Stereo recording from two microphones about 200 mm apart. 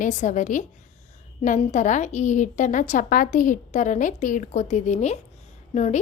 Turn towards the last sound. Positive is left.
turn(degrees=35)  # may be behind; listen again after turning